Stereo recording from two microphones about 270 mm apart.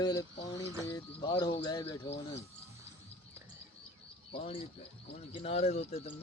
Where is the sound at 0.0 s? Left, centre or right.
Centre.